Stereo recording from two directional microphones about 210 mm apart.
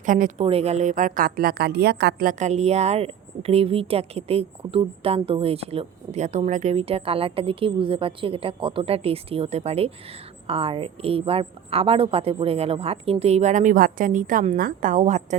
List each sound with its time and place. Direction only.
0.0 s a woman's voice: 40° right (ahead or behind)
2.4 s a woman's voice: 30° right (ahead or behind)